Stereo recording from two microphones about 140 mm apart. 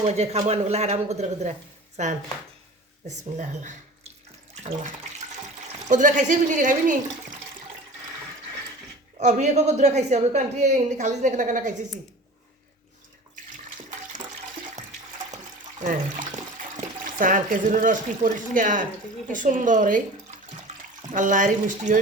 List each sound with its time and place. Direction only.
0.0 s speech: 50° right (ahead or behind)
5.9 s speech: 65° right (ahead or behind)
9.1 s speech: 55° right (ahead or behind)
15.8 s a woman's voice: 70° right (ahead or behind)
21.1 s speech: 65° right (ahead or behind)